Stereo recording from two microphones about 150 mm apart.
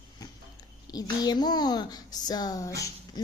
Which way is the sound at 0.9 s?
25° left (ahead or behind).